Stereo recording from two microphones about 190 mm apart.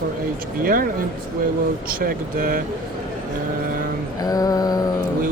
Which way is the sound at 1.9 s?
50° right (ahead or behind).